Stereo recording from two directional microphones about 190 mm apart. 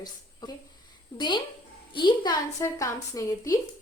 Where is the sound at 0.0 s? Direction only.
20° left (ahead or behind).